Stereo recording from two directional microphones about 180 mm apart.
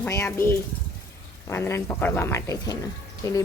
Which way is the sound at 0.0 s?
15° left (ahead or behind).